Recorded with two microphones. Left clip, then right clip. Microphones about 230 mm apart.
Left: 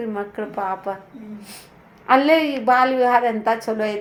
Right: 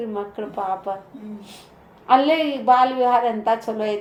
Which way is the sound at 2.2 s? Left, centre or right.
Left.